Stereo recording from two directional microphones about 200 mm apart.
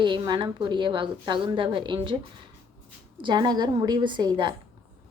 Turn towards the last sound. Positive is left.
turn(degrees=-20)  # may be behind; listen again after turning